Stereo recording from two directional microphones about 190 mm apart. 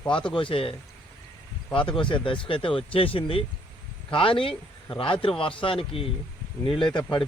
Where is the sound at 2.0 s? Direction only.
25° left (ahead or behind).